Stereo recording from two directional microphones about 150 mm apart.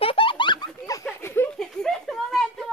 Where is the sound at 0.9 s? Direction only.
20° left (ahead or behind).